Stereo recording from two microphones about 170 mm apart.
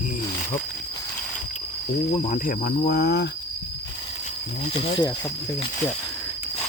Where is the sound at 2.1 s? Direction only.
45° left (ahead or behind); by 3.3 s 75° left (ahead or behind).